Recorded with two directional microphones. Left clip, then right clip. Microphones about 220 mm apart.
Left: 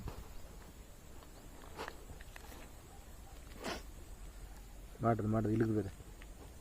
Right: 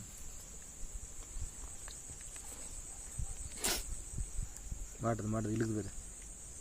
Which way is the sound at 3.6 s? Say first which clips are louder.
Right 5 dB; 30° right (ahead or behind).